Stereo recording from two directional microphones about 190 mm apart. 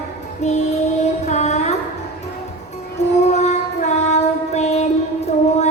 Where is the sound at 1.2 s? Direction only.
35° left (ahead or behind).